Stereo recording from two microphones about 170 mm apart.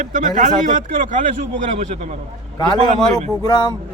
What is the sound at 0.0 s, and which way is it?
Speech, 55° right (ahead or behind).